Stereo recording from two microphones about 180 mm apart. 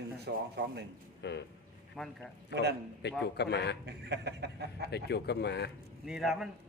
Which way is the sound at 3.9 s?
70° right (ahead or behind).